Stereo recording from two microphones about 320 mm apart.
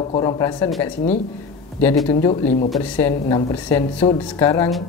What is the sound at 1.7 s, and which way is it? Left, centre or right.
Speech, centre.